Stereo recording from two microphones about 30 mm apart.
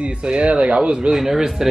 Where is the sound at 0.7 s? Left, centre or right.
Right.